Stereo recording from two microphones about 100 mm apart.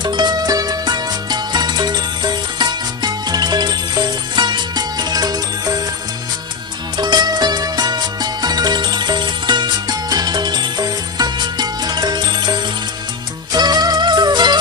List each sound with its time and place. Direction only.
0.0 s music: 45° right (ahead or behind)
6.9 s music: 45° right (ahead or behind)